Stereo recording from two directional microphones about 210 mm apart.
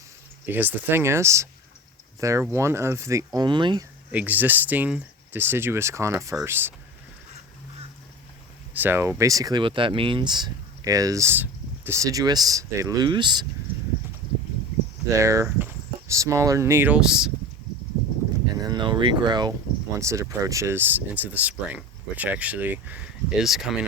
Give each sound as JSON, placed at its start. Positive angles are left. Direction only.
{"t": 0.4, "sound": "speech", "side_deg": -10}
{"t": 4.1, "sound": "speech", "side_deg": -10}
{"t": 8.7, "sound": "speech", "side_deg": -10}
{"t": 15.1, "sound": "speech", "side_deg": -15}
{"t": 18.5, "sound": "speech", "side_deg": -20}